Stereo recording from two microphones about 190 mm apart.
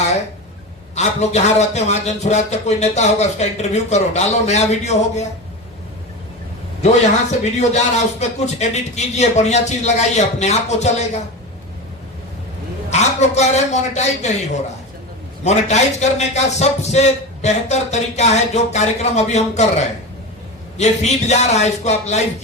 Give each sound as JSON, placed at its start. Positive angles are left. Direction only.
{"t": 0.9, "sound": "a man's voice", "side_deg": 35}
{"t": 6.8, "sound": "a man's voice", "side_deg": 35}
{"t": 12.9, "sound": "a man's voice", "side_deg": 35}
{"t": 15.4, "sound": "a man's voice", "side_deg": 35}